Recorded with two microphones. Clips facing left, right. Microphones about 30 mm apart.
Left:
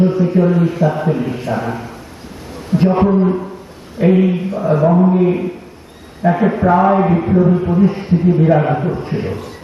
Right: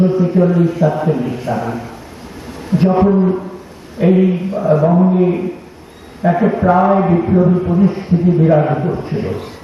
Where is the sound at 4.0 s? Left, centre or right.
Centre.